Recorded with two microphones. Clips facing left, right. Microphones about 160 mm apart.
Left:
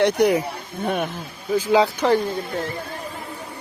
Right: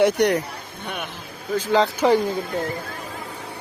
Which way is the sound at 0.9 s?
50° left (ahead or behind).